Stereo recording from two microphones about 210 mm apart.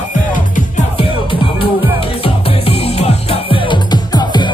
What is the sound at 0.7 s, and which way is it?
Music, 25° left (ahead or behind).